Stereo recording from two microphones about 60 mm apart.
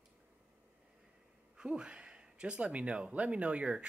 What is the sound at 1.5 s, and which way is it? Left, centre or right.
Speech, centre.